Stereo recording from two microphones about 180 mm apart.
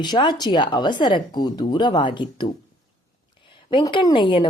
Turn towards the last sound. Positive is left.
turn(degrees=25)  # may be behind; listen again after turning